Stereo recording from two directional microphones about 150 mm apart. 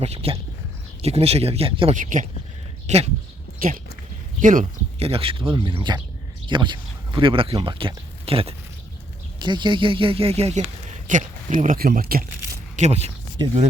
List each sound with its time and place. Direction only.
0.0 s speech: 45° right (ahead or behind)
2.0 s speech: 60° right (ahead or behind)
2.8 s speech: 45° right (ahead or behind)
3.6 s speech: 75° right (ahead or behind)
4.4 s speech: 60° right (ahead or behind)
4.9 s speech: 40° right (ahead or behind)
11.1 s speech: 55° right (ahead or behind); by 12.2 s 85° right
12.7 s speech: 45° right (ahead or behind)
13.4 s speech: 30° right (ahead or behind)